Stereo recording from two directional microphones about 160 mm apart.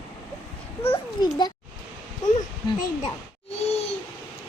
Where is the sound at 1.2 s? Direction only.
25° left (ahead or behind).